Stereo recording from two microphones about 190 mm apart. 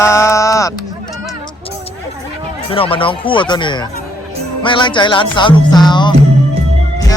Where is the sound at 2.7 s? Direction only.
30° left (ahead or behind).